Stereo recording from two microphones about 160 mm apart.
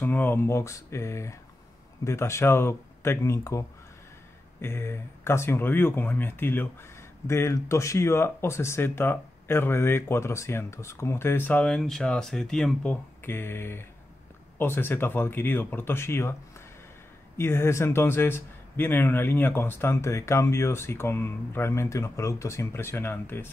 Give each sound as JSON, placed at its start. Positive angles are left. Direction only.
{"t": 0.0, "sound": "speech", "side_deg": 10}
{"t": 13.2, "sound": "speech", "side_deg": 15}
{"t": 17.4, "sound": "speech", "side_deg": 15}